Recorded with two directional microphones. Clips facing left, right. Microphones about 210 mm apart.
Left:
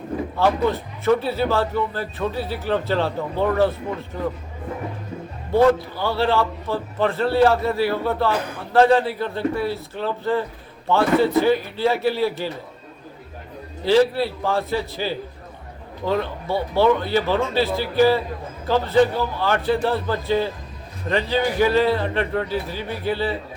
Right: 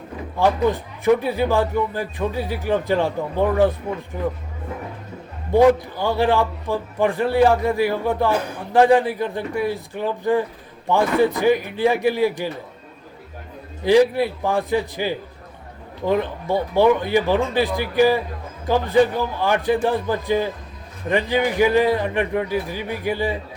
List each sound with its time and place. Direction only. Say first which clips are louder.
0.3 s a man's voice: right 2 dB; 15° right (ahead or behind)
5.5 s a man's voice: right 2 dB; 15° right (ahead or behind)
13.8 s a man's voice: right 2 dB; 15° right (ahead or behind)